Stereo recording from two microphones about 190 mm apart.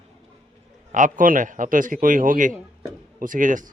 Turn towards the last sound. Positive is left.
turn(degrees=-45)  # may be behind; listen again after turning